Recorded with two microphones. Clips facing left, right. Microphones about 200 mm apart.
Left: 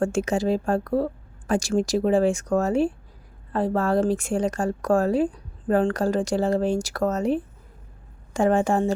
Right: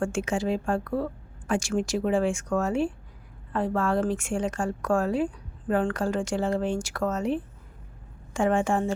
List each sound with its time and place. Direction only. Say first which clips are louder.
0.0 s speech: left 4 dB; 40° left (ahead or behind)